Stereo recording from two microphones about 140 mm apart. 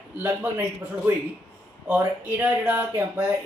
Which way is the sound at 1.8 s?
15° right (ahead or behind).